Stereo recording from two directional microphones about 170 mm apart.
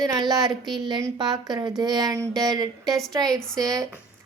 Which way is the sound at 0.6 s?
Centre (ahead or behind).